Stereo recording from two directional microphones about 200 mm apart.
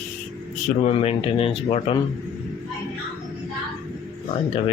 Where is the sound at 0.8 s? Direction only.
30° left (ahead or behind).